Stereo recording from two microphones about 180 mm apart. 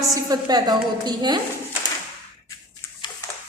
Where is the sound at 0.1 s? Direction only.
20° right (ahead or behind).